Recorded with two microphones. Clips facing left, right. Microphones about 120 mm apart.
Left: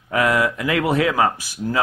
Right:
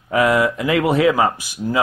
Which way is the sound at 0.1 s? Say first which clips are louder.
Right 3 dB; 25° right (ahead or behind).